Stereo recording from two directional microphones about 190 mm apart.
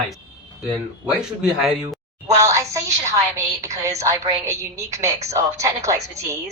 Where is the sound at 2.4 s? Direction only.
15° right (ahead or behind).